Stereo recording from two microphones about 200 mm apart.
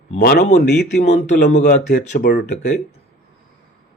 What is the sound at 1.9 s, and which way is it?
Speech, 50° left (ahead or behind).